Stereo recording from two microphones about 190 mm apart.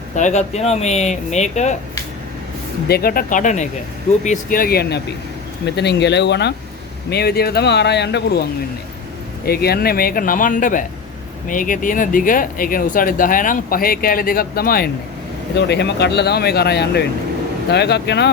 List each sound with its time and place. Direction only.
0.2 s speech: 35° left (ahead or behind)
2.8 s speech: 55° left (ahead or behind)
9.5 s speech: 55° left (ahead or behind)